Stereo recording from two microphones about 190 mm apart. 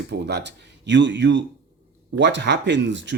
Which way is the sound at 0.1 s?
65° right (ahead or behind).